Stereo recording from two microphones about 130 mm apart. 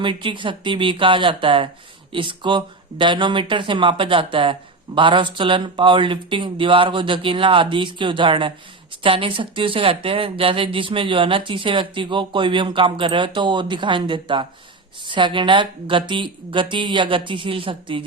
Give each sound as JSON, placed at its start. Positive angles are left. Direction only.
{"t": 0.0, "sound": "speech", "side_deg": -40}